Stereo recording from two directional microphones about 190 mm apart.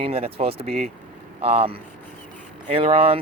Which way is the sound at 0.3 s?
30° right (ahead or behind).